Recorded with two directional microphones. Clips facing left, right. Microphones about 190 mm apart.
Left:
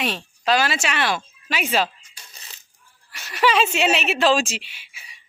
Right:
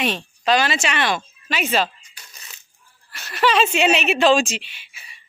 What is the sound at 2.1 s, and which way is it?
Coin, 30° left (ahead or behind).